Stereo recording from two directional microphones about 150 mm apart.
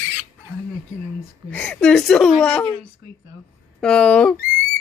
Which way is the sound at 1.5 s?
5° left (ahead or behind).